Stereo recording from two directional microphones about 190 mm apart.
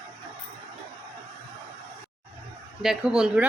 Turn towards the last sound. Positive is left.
turn(degrees=-5)  # may be behind; listen again after turning